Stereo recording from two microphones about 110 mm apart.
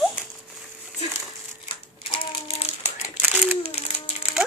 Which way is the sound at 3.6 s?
70° left (ahead or behind).